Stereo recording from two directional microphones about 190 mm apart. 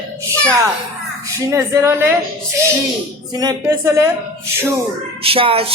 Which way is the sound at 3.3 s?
20° right (ahead or behind).